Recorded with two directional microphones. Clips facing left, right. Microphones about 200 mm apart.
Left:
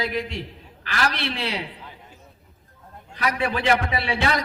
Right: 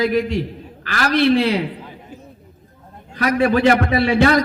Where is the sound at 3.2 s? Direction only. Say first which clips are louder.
Right 9 dB; 45° right (ahead or behind).